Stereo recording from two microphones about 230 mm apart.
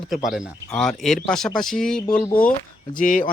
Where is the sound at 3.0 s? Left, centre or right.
Left.